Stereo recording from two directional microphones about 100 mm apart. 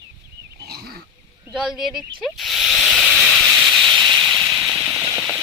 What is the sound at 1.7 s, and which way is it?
Speech, 5° right (ahead or behind).